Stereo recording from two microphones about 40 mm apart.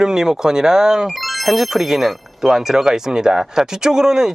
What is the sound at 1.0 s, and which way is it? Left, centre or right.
Speech, centre.